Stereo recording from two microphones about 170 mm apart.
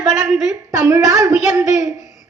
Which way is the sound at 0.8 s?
20° right (ahead or behind).